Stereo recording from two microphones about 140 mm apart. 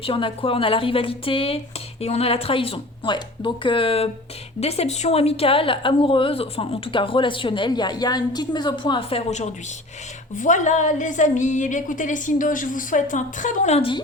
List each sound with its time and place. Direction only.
0.0 s speech: 40° left (ahead or behind)
10.3 s a woman's voice: 65° left (ahead or behind)
13.7 s speech: 40° left (ahead or behind)